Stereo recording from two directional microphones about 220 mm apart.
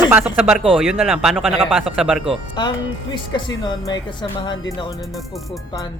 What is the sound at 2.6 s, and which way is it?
Speech, 20° left (ahead or behind).